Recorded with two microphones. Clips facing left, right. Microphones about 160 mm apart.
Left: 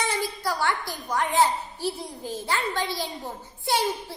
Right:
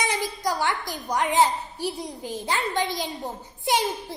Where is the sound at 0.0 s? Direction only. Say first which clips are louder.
Right 1 dB; 15° right (ahead or behind).